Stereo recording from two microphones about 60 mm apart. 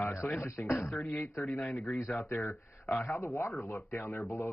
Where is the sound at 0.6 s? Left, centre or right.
Left.